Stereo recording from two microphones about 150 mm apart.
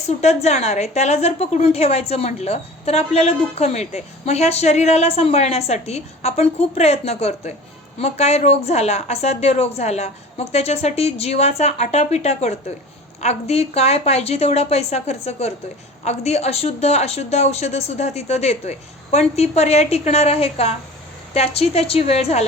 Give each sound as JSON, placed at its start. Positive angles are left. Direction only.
{"t": 0.2, "sound": "a woman's voice", "side_deg": 45}